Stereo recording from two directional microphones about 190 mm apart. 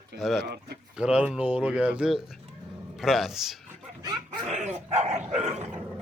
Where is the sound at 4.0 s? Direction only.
20° right (ahead or behind).